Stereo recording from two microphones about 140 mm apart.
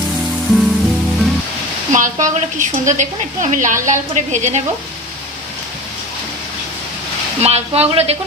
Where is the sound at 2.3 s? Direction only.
60° right (ahead or behind).